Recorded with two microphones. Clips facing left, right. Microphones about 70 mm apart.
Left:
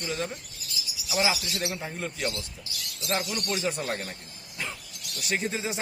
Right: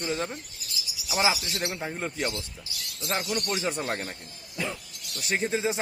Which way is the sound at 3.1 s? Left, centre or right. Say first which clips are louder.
Even; centre.